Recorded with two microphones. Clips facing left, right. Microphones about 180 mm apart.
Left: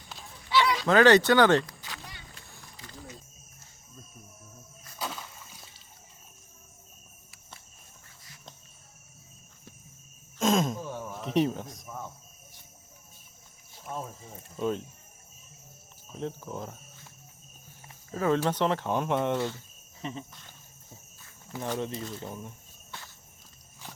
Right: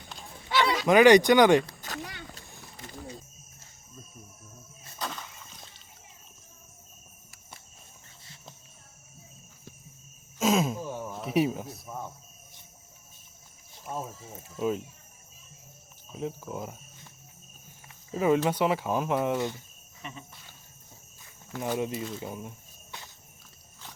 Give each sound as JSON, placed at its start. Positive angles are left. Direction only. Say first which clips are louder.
{"t": 0.5, "sound": "a sound", "louder": "even", "side_deg": -50}
{"t": 0.9, "sound": "speech", "louder": "right 3 dB", "side_deg": -15}
{"t": 1.8, "sound": "a sound", "louder": "right 5 dB", "side_deg": -45}
{"t": 2.8, "sound": "wild animals", "louder": "right 5 dB", "side_deg": -50}
{"t": 4.9, "sound": "a sound", "louder": "even", "side_deg": 5}
{"t": 10.3, "sound": "cricket", "louder": "even", "side_deg": -5}
{"t": 13.8, "sound": "speech", "louder": "right 1 dB", "side_deg": -5}
{"t": 16.1, "sound": "speech", "louder": "right 1 dB", "side_deg": -5}
{"t": 18.1, "sound": "speech", "louder": "right 2 dB", "side_deg": -15}
{"t": 19.4, "sound": "speech", "louder": "even", "side_deg": -15}
{"t": 20.0, "sound": "speech", "louder": "left 6 dB", "side_deg": 30}
{"t": 21.6, "sound": "speech", "louder": "right 2 dB", "side_deg": -10}